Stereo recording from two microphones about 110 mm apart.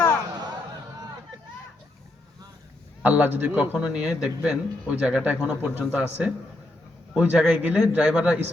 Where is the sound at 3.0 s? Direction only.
15° right (ahead or behind).